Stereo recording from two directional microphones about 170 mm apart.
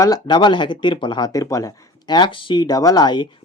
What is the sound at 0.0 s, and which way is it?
Speech, 25° left (ahead or behind).